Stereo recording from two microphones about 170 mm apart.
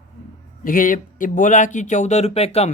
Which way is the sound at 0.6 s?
55° left (ahead or behind).